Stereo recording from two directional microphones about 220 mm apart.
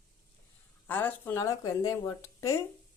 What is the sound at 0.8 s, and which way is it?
Speech, 10° left (ahead or behind).